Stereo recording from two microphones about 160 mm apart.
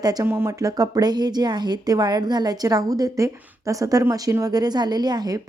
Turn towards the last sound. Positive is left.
turn(degrees=-25)  # may be behind; listen again after turning